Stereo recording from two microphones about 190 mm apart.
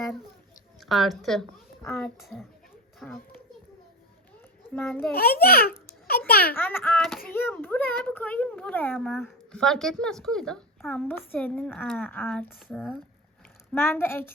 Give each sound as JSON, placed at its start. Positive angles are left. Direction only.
{"t": 0.9, "sound": "a woman's voice", "side_deg": 0}
{"t": 4.7, "sound": "a child's voice", "side_deg": 10}
{"t": 5.1, "sound": "a child's voice", "side_deg": 55}
{"t": 6.1, "sound": "a sound", "side_deg": 55}
{"t": 6.5, "sound": "a child's voice", "side_deg": 10}
{"t": 13.7, "sound": "a child's voice", "side_deg": 10}